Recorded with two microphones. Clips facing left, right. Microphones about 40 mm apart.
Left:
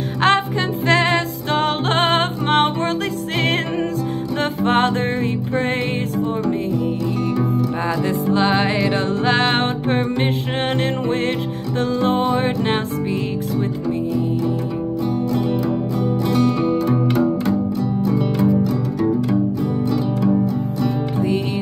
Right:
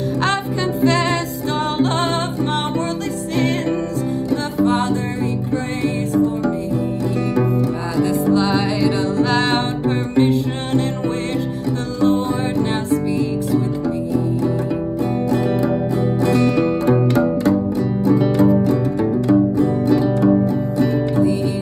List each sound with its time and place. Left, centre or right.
0.8 s music: left
4.6 s music: left
8.0 s music: left
12.0 s music: left
15.3 s music: right
18.0 s music: right